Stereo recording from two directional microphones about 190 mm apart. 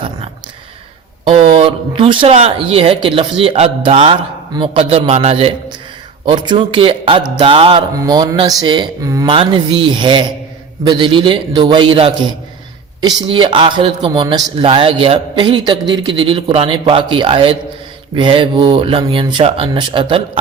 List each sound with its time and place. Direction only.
1.3 s a man's voice: 30° right (ahead or behind)